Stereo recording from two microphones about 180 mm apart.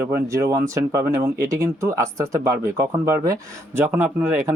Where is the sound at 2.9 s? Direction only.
15° right (ahead or behind).